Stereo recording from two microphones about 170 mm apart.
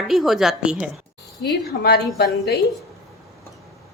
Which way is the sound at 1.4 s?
70° left (ahead or behind).